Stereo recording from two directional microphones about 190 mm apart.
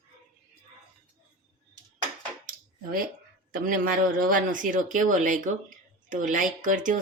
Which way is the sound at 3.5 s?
45° right (ahead or behind).